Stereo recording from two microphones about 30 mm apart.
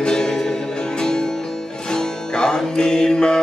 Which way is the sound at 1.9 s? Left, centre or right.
Left.